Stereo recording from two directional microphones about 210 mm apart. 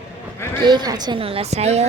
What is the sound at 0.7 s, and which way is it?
A woman's voice, 20° right (ahead or behind).